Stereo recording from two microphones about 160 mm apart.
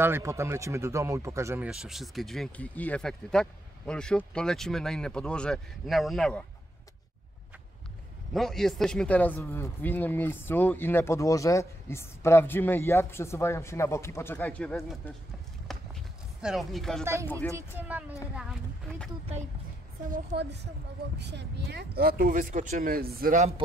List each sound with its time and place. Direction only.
0.0 s speech: 15° right (ahead or behind)
1.7 s speech: 5° right (ahead or behind)
8.3 s speech: centre (ahead or behind)
15.7 s a sound: centre (ahead or behind)
17.0 s speech: 15° right (ahead or behind)
21.2 s speech: 90° right; by 23.4 s 65° right (ahead or behind)